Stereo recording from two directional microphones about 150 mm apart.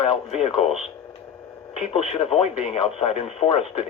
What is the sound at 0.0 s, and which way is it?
Speech, 40° left (ahead or behind).